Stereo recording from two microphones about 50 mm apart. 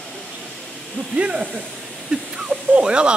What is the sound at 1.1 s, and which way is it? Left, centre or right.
Speech, right.